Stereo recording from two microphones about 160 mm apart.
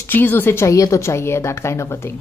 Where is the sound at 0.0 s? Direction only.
15° left (ahead or behind).